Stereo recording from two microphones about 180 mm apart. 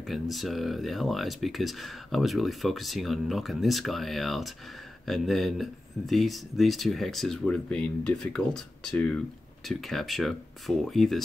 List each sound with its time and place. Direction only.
0.0 s speech: centre (ahead or behind)